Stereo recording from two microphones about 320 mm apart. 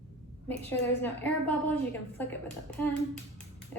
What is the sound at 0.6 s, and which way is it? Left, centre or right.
A woman's voice, centre.